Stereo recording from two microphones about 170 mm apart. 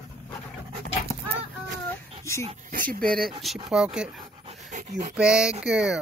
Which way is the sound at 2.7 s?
55° right (ahead or behind).